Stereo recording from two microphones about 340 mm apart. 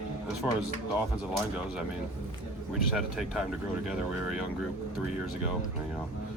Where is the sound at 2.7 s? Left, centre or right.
Centre.